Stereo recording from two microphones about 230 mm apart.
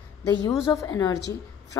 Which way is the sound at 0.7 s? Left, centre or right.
Centre.